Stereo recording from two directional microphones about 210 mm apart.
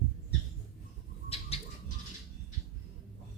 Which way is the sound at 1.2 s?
30° left (ahead or behind).